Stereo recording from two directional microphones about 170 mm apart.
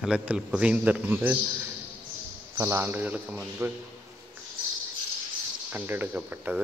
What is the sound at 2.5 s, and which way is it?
A man's voice, 15° right (ahead or behind).